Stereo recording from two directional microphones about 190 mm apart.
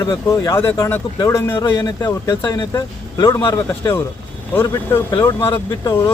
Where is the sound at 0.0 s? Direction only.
15° left (ahead or behind).